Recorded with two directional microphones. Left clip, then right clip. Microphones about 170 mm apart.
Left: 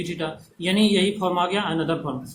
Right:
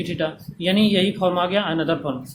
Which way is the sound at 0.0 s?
30° right (ahead or behind).